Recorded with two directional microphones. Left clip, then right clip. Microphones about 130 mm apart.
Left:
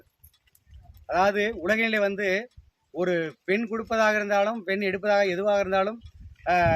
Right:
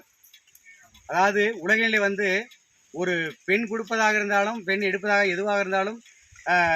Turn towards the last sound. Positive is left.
turn(degrees=40)  # may be behind; listen again after turning